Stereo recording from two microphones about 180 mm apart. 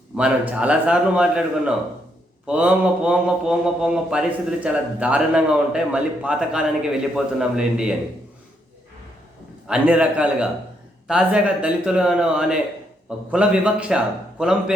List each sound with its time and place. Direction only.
0.2 s a man's voice: 5° right (ahead or behind)
9.6 s a man's voice: 5° right (ahead or behind)